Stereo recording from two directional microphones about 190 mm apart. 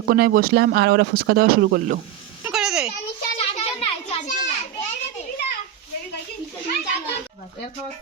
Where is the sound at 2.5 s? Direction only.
5° right (ahead or behind).